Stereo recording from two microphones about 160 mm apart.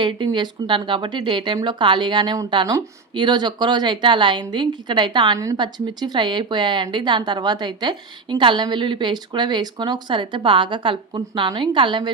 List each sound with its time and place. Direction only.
0.0 s a woman's voice: 30° right (ahead or behind)